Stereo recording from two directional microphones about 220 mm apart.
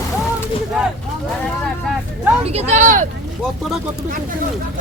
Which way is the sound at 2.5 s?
30° right (ahead or behind).